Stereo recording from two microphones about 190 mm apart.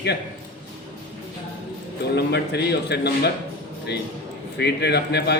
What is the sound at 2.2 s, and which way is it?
A man's voice, 60° left (ahead or behind).